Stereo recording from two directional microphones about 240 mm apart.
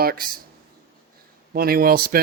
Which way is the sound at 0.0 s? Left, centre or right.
Right.